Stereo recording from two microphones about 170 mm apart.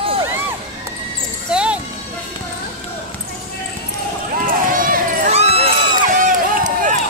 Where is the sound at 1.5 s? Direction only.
5° right (ahead or behind).